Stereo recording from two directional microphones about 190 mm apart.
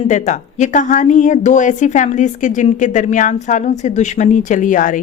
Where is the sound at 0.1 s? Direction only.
40° left (ahead or behind).